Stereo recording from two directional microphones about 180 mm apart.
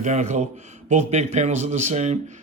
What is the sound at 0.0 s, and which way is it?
A man's voice, 40° right (ahead or behind).